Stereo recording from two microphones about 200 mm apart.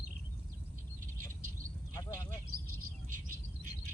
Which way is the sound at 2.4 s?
90° right.